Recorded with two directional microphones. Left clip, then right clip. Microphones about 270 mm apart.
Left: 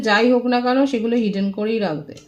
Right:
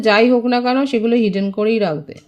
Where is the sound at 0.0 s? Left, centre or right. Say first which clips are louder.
Right 3 dB; right.